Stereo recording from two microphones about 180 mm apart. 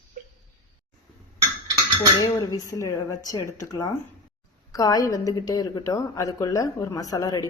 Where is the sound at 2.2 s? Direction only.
20° left (ahead or behind).